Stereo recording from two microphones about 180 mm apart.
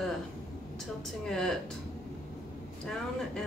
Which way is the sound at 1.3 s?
Centre (ahead or behind).